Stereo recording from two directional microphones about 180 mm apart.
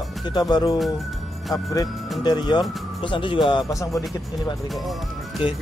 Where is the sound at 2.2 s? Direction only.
25° left (ahead or behind).